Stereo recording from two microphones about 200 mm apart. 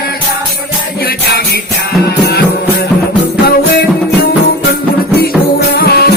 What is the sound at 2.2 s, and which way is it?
Music, 55° left (ahead or behind).